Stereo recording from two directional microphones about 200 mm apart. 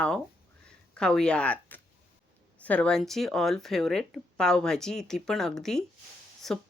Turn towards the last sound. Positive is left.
turn(degrees=0)  # may be behind; listen again after turning